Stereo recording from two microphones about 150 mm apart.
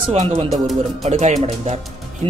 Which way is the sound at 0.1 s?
45° right (ahead or behind).